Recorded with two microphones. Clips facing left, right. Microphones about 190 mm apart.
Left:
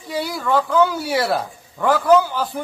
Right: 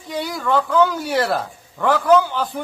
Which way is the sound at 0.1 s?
5° left (ahead or behind).